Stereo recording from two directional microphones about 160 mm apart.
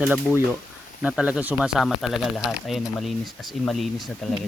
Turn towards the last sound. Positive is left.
turn(degrees=0)  # may be behind; listen again after turning